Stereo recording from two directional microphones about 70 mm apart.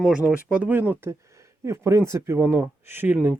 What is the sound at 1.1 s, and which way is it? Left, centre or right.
Speech, right.